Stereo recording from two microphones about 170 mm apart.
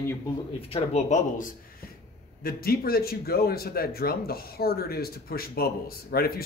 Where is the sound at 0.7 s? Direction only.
40° left (ahead or behind).